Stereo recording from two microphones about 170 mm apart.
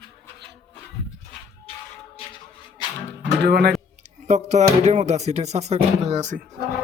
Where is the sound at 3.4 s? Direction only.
70° right (ahead or behind).